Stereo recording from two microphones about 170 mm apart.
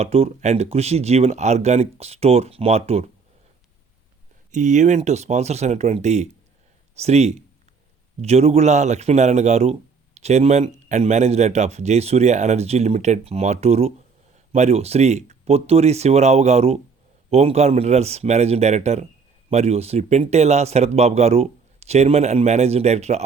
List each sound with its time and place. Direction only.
0.0 s speech: 40° right (ahead or behind)
4.5 s speech: 45° right (ahead or behind)